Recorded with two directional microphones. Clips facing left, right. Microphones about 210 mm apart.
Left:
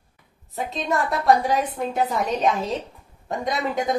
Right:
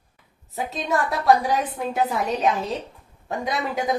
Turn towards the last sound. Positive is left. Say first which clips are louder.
# left 1 dB
turn(degrees=0)  # may be behind; listen again after turning